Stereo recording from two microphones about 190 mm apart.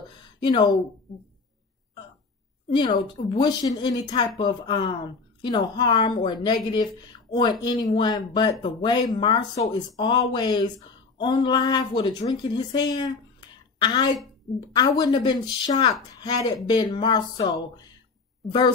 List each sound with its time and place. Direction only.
0.4 s speech: 25° left (ahead or behind)
2.7 s speech: 25° left (ahead or behind)